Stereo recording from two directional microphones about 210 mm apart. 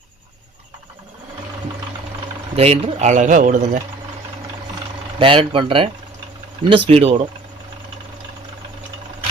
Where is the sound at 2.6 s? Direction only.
30° right (ahead or behind).